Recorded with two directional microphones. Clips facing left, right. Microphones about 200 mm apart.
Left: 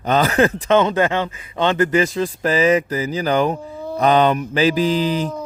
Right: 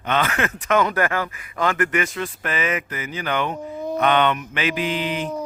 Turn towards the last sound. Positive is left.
turn(degrees=35)  # may be behind; listen again after turning